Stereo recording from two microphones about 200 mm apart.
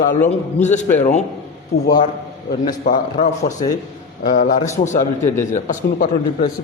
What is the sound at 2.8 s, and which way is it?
A man's voice, 40° left (ahead or behind).